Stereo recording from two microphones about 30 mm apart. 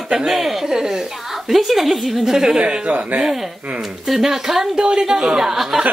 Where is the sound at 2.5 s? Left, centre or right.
Right.